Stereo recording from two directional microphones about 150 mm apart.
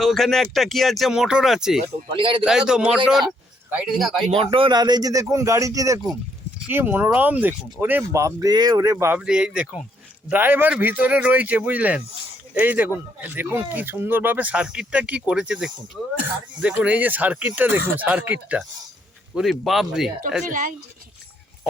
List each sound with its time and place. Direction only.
0.0 s speech: centre (ahead or behind)
2.1 s speech: 35° right (ahead or behind)
2.4 s speech: 5° right (ahead or behind)
4.4 s speech: 35° right (ahead or behind); by 9.1 s 20° right (ahead or behind)
9.1 s speech: 5° right (ahead or behind)
20.5 s speech: 60° right (ahead or behind)